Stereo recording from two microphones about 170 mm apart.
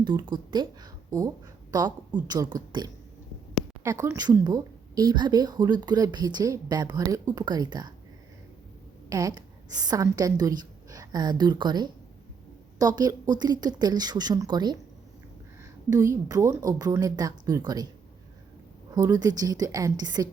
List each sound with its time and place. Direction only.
0.0 s a woman's voice: 25° right (ahead or behind)
3.8 s a woman's voice: 20° right (ahead or behind)
9.0 s a woman's voice: 20° right (ahead or behind)
15.9 s a woman's voice: 20° right (ahead or behind)
18.9 s a woman's voice: 20° right (ahead or behind)